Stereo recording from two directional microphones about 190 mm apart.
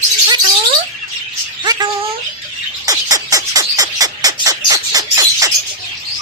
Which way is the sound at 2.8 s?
20° right (ahead or behind).